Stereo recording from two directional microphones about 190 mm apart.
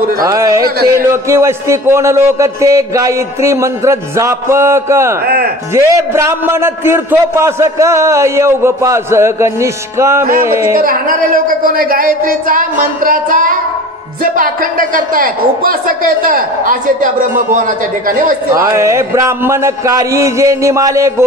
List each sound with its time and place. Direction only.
0.3 s a man's voice: 15° right (ahead or behind)
5.2 s a woman's voice: 55° right (ahead or behind)
5.8 s a man's voice: 15° right (ahead or behind)
10.8 s a woman's voice: 50° right (ahead or behind)
18.5 s a man's voice: 15° right (ahead or behind)